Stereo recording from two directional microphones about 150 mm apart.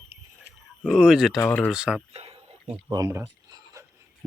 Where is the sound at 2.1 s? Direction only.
40° right (ahead or behind).